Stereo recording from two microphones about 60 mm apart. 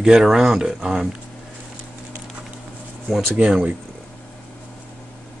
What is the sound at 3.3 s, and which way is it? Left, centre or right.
Speech, centre.